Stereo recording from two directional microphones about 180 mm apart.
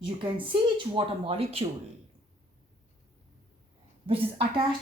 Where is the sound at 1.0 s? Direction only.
30° right (ahead or behind).